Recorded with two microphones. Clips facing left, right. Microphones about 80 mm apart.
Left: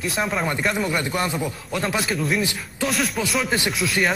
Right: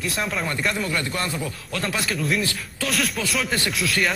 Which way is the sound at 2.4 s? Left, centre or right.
Centre.